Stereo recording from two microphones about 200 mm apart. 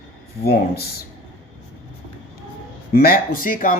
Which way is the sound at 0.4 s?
50° left (ahead or behind).